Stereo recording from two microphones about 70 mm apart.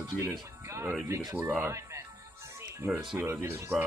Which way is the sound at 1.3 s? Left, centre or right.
Right.